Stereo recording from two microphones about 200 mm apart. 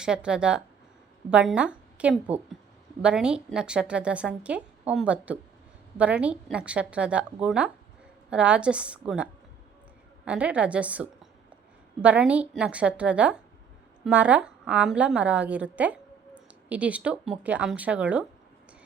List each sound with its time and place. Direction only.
0.0 s a woman's voice: 5° right (ahead or behind)